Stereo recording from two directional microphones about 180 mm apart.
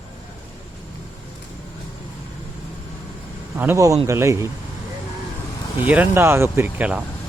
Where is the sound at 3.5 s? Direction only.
15° right (ahead or behind).